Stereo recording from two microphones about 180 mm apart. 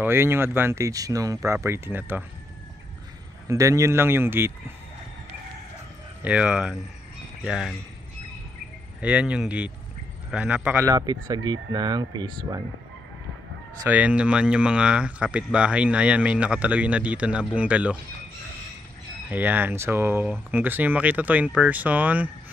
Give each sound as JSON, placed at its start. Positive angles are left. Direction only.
{"t": 0.0, "sound": "speech", "side_deg": -15}
{"t": 3.4, "sound": "speech", "side_deg": -15}
{"t": 6.2, "sound": "speech", "side_deg": -5}
{"t": 9.0, "sound": "speech", "side_deg": -5}
{"t": 10.9, "sound": "speech", "side_deg": -20}
{"t": 13.8, "sound": "speech", "side_deg": -10}
{"t": 19.2, "sound": "speech", "side_deg": -10}